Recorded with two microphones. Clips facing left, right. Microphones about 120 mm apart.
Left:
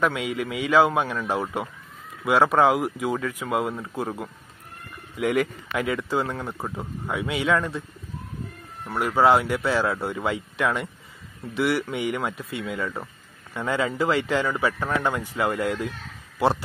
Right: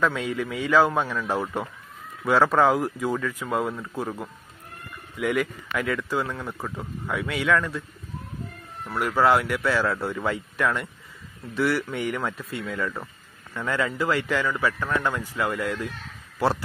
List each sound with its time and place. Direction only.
0.0 s speech: 15° left (ahead or behind)
8.8 s speech: 20° left (ahead or behind)